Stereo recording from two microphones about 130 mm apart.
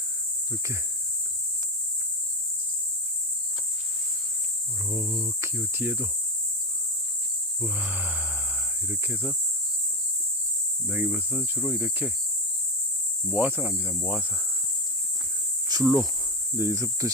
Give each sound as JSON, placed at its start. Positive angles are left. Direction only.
{"t": 4.9, "sound": "speech", "side_deg": -15}
{"t": 7.6, "sound": "speech", "side_deg": -10}
{"t": 10.8, "sound": "speech", "side_deg": -10}
{"t": 13.2, "sound": "speech", "side_deg": -15}
{"t": 15.7, "sound": "speech", "side_deg": -25}
{"t": 16.6, "sound": "cricket", "side_deg": -20}